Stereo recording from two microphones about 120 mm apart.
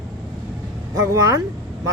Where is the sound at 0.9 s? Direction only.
25° right (ahead or behind).